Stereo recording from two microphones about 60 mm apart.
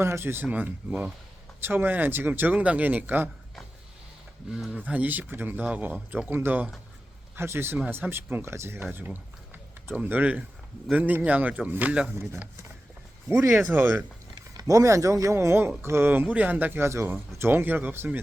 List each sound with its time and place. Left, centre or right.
0.0 s speech: right
0.4 s speech: right
1.6 s speech: right
4.9 s speech: right
5.6 s speech: right
13.6 s speech: right
14.5 s speech: right
16.2 s speech: right
16.8 s speech: right